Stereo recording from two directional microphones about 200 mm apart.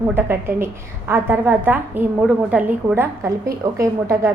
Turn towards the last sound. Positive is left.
turn(degrees=-15)  # may be behind; listen again after turning